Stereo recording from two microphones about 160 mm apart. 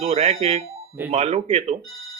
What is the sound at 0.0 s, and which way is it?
Speech, 40° right (ahead or behind).